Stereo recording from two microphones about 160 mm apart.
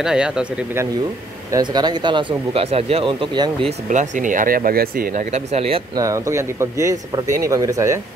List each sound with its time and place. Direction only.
0.0 s speech: 5° right (ahead or behind)
1.5 s speech: 25° right (ahead or behind)
3.9 s speech: 50° right (ahead or behind)
5.3 s speech: 40° right (ahead or behind)
5.9 s speech: 20° right (ahead or behind)